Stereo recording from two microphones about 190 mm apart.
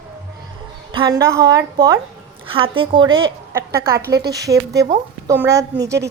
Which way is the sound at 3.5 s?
15° right (ahead or behind).